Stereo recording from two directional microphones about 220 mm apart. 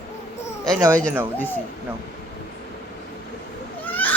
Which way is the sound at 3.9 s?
10° left (ahead or behind).